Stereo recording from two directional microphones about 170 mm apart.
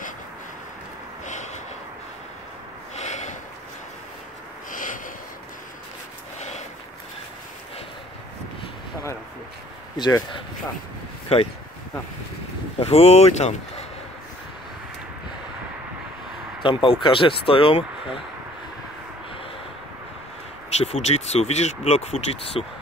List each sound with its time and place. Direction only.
1.2 s a sound: 45° left (ahead or behind)
3.0 s snort: 45° left (ahead or behind)
4.6 s snort: 50° left (ahead or behind)
9.9 s speech: 25° left (ahead or behind)
12.7 s speech: 35° left (ahead or behind)
16.6 s speech: 30° left (ahead or behind)
20.7 s speech: 40° left (ahead or behind)